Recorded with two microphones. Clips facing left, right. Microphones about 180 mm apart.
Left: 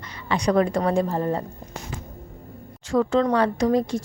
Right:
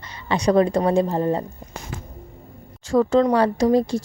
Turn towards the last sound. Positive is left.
turn(degrees=-35)  # may be behind; listen again after turning